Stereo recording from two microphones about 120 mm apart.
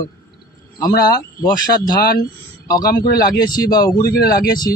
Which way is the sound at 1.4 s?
35° left (ahead or behind).